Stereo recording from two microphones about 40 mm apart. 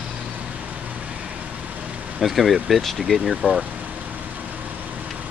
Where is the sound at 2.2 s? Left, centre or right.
Centre.